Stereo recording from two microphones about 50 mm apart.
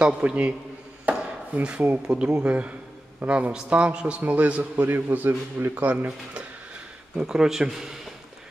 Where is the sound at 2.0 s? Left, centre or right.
Centre.